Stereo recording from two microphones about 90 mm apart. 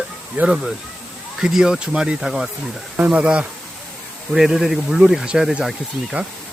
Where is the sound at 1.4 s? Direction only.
5° right (ahead or behind).